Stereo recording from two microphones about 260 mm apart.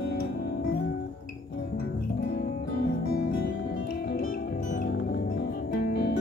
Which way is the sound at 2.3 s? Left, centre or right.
Left.